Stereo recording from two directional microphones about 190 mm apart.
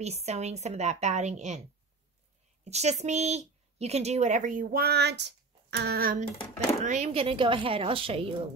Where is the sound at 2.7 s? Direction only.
35° right (ahead or behind); by 6.2 s 50° right (ahead or behind).